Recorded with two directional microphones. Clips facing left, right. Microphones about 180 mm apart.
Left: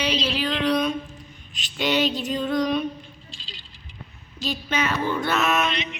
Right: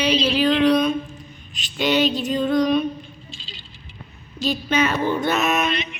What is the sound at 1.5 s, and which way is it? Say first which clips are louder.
Female singing: right 3 dB; 50° right (ahead or behind).